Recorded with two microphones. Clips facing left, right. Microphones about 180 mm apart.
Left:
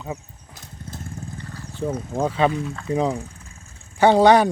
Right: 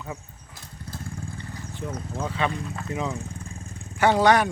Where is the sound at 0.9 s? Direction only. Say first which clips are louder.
Left 1 dB; 20° left (ahead or behind).